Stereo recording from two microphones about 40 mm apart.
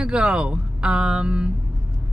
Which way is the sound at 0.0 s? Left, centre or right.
Right.